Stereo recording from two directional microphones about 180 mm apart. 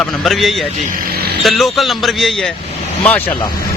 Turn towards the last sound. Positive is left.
turn(degrees=10)  # may be behind; listen again after turning